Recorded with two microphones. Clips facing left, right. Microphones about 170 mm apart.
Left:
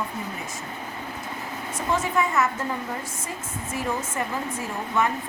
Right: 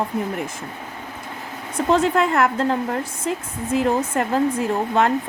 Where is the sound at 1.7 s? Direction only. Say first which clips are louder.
Right 7 dB; 70° right (ahead or behind).